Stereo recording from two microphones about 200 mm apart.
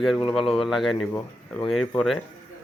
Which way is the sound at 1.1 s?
10° left (ahead or behind).